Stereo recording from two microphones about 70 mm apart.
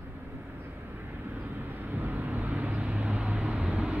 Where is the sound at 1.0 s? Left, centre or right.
Right.